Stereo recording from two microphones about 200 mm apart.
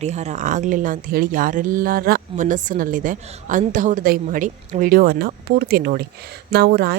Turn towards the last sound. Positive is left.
turn(degrees=-50)  # may be behind; listen again after turning